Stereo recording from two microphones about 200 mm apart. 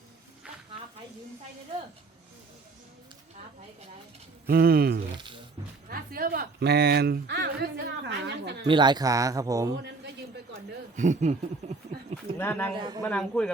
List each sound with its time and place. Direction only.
4.4 s speech: 50° right (ahead or behind)
5.1 s a sound: 25° right (ahead or behind)
5.9 s speech: 45° right (ahead or behind)
8.6 s speech: 25° right (ahead or behind)
9.7 s a man's voice: 60° right (ahead or behind)
10.9 s speech: 40° right (ahead or behind)
12.4 s speech: 10° left (ahead or behind)